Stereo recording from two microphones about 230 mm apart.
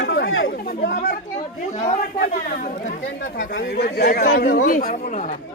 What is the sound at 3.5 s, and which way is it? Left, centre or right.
Speech, left.